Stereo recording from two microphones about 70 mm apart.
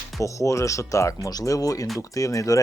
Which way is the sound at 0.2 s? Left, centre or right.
Left.